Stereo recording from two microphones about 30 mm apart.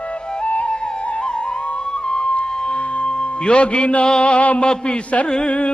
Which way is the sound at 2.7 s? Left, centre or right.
Left.